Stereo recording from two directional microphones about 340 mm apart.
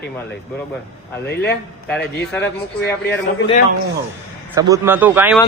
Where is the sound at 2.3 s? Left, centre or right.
Centre.